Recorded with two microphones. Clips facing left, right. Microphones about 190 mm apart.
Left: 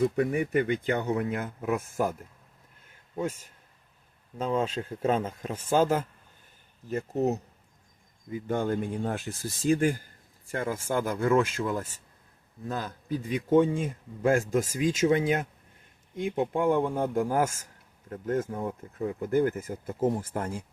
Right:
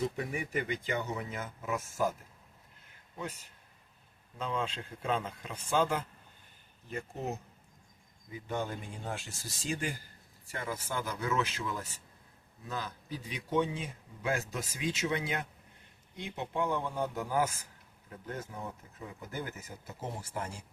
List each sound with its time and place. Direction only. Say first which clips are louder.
0.0 s speech: left 9 dB; 55° left (ahead or behind)
3.2 s speech: left 10 dB; 45° left (ahead or behind)